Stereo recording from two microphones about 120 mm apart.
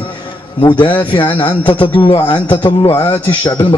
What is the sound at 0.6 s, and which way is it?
A man's voice, 45° left (ahead or behind).